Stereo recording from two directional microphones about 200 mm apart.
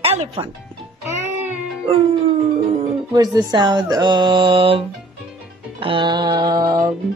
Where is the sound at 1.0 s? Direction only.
10° right (ahead or behind).